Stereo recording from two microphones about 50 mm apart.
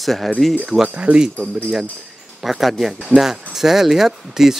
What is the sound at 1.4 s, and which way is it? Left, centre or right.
Speech, centre.